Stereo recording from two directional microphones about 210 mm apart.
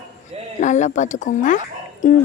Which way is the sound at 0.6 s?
35° left (ahead or behind).